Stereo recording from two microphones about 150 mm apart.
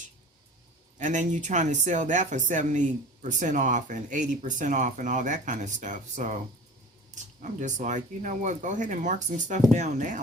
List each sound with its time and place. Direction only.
0.9 s speech: 55° right (ahead or behind)
7.4 s speech: 55° right (ahead or behind)